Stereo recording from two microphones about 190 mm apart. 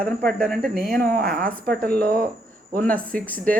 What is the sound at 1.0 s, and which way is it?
Speech, 50° right (ahead or behind).